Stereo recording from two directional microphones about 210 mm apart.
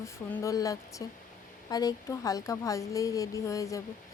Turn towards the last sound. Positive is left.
turn(degrees=15)  # may be behind; listen again after turning